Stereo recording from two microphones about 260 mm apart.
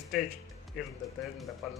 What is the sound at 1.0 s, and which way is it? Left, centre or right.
Speech, centre.